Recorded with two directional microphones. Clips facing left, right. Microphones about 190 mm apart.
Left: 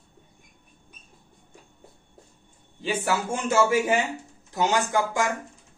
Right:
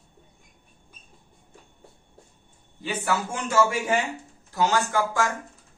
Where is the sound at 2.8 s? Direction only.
25° left (ahead or behind).